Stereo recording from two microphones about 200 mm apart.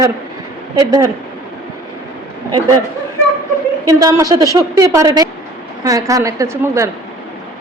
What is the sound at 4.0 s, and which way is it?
Speech, 15° right (ahead or behind).